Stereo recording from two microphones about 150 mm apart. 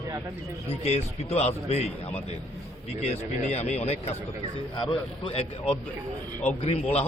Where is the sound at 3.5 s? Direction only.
45° left (ahead or behind).